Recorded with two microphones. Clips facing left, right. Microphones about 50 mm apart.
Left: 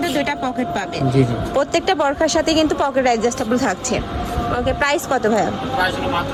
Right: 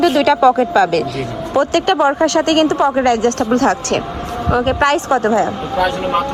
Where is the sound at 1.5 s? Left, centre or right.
Right.